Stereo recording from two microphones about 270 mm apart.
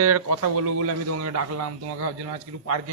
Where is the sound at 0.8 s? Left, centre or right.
Right.